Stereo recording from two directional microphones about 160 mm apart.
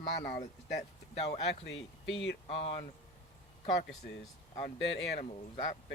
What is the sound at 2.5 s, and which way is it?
Speech, 35° left (ahead or behind).